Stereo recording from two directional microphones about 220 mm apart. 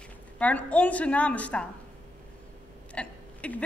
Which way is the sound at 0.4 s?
5° left (ahead or behind).